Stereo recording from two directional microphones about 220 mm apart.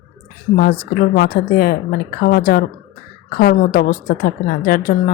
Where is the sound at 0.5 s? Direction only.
40° left (ahead or behind).